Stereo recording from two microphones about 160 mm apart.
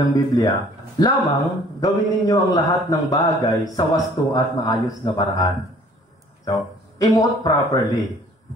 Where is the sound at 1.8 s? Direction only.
25° left (ahead or behind).